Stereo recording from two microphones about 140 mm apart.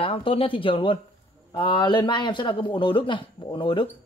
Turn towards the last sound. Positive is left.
turn(degrees=35)  # may be behind; listen again after turning